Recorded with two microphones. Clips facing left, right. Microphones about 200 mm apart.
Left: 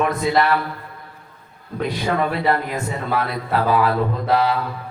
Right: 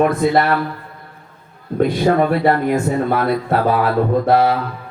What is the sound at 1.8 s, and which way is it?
Speech, 50° right (ahead or behind).